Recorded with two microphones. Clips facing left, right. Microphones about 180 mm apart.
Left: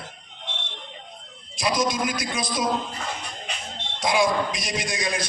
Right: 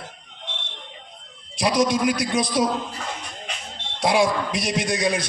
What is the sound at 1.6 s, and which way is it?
A man's voice, 65° right (ahead or behind).